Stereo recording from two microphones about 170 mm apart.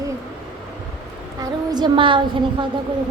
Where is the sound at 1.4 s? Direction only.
25° right (ahead or behind).